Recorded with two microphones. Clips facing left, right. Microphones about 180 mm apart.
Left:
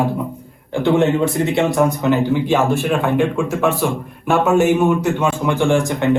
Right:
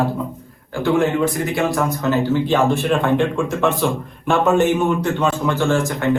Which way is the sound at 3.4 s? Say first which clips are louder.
Left 1 dB; centre (ahead or behind).